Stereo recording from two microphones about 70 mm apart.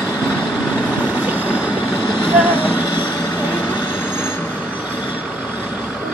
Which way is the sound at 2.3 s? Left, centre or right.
Right.